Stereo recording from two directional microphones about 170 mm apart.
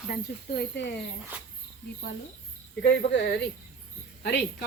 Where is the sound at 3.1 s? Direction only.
90° left.